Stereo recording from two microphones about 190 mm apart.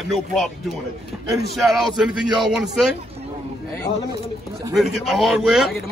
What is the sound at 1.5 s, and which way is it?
A man's voice, centre (ahead or behind).